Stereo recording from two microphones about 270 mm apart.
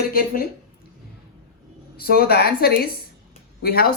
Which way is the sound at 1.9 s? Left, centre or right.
Left.